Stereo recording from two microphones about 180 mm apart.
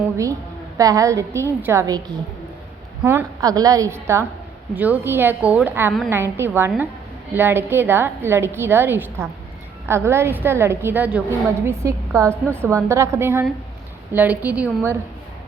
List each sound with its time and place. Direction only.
0.8 s a woman's voice: 20° right (ahead or behind)
3.0 s a woman's voice: 10° right (ahead or behind)